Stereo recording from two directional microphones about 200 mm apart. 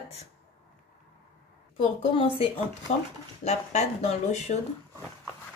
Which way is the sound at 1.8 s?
30° left (ahead or behind).